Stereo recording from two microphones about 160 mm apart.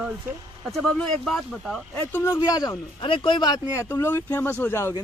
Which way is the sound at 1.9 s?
15° left (ahead or behind).